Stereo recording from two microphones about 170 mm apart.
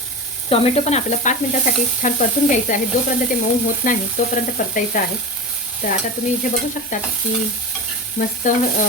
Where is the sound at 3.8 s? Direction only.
50° left (ahead or behind).